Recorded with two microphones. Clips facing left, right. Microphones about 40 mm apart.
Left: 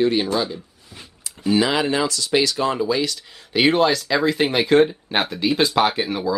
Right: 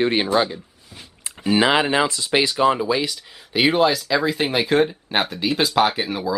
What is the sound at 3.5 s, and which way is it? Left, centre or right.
Speech, centre.